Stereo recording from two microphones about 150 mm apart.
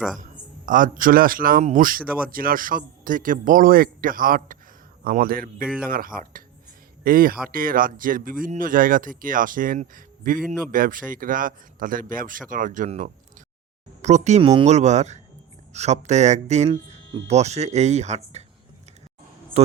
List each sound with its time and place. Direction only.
0.2 s a man's voice: 60° right (ahead or behind)